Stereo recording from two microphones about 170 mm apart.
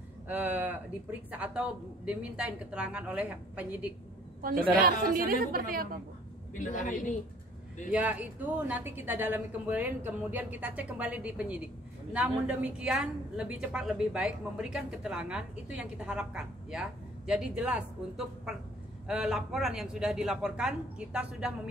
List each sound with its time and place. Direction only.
0.3 s speech: 10° right (ahead or behind)
4.4 s a woman's voice: 60° right (ahead or behind)
6.6 s a woman's voice: 50° left (ahead or behind)
7.9 s a woman's voice: 10° right (ahead or behind)